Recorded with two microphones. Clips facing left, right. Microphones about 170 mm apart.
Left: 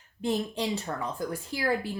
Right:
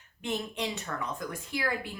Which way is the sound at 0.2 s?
35° left (ahead or behind).